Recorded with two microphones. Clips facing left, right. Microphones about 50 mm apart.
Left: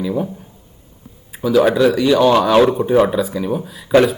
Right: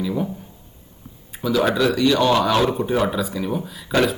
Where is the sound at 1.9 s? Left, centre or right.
Centre.